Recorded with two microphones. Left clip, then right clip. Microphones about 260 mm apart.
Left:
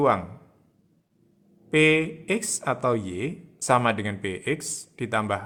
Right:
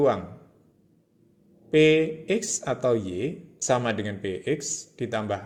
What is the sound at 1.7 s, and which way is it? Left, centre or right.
Speech, centre.